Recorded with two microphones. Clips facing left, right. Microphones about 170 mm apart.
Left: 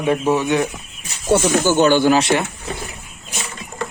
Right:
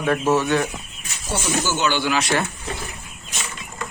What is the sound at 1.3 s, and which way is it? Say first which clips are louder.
Speech: left 9 dB; 55° left (ahead or behind).